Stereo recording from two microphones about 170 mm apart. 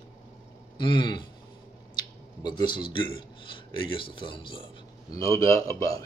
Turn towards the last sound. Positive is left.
turn(degrees=20)  # may be behind; listen again after turning